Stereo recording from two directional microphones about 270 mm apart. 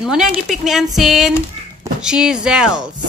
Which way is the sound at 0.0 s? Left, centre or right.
Centre.